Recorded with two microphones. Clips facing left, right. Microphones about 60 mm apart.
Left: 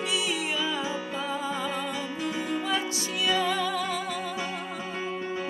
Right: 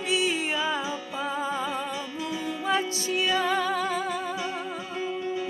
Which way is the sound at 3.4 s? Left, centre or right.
Right.